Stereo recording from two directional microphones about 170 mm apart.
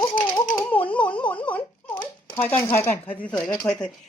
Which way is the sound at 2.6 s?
15° left (ahead or behind).